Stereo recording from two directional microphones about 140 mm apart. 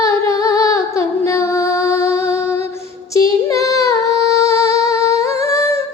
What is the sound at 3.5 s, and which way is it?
Female singing, 20° left (ahead or behind).